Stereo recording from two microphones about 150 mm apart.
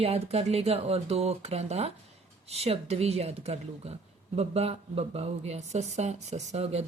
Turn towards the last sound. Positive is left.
turn(degrees=-45)  # may be behind; listen again after turning